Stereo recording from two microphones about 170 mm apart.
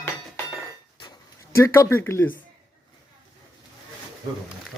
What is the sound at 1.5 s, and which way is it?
Speech, 15° left (ahead or behind).